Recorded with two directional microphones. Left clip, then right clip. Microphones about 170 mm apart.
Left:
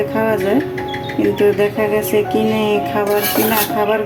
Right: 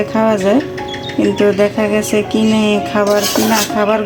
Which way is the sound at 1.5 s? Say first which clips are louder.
Right 2 dB; 25° right (ahead or behind).